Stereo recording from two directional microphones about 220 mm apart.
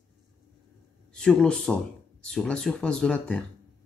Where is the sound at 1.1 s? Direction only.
5° left (ahead or behind).